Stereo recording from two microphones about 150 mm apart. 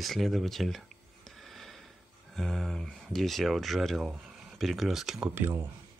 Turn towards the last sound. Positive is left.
turn(degrees=-15)  # may be behind; listen again after turning